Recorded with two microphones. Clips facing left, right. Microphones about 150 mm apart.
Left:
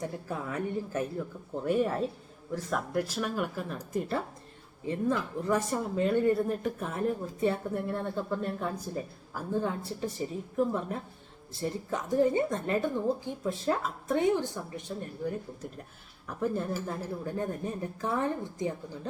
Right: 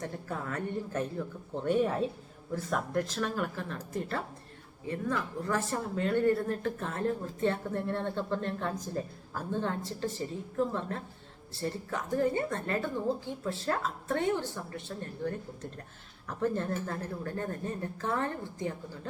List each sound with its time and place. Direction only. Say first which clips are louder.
0.0 s a woman's voice: left 2 dB; 10° left (ahead or behind)
16.4 s speech: even; 10° left (ahead or behind)